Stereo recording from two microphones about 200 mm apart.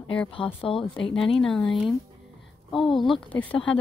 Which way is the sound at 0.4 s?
5° left (ahead or behind).